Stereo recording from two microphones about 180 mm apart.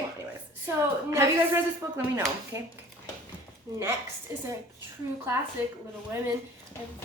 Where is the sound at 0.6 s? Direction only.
15° right (ahead or behind).